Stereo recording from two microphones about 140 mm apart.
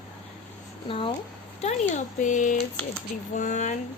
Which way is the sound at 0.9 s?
40° left (ahead or behind).